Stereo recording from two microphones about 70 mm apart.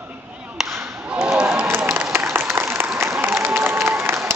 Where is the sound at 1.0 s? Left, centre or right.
Centre.